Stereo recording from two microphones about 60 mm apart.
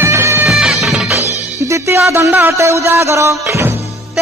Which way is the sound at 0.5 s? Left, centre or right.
Centre.